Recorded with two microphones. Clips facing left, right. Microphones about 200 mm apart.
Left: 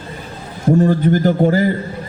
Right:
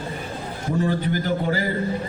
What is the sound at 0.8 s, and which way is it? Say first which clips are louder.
Speech: left 7 dB; 45° left (ahead or behind).